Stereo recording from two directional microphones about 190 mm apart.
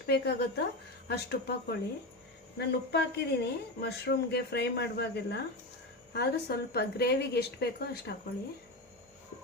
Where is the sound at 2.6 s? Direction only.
60° left (ahead or behind).